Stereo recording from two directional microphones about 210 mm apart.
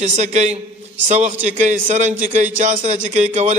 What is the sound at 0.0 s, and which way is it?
A man's voice, 35° right (ahead or behind).